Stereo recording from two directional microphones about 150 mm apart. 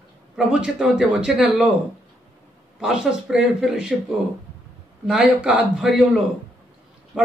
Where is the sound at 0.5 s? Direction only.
5° right (ahead or behind).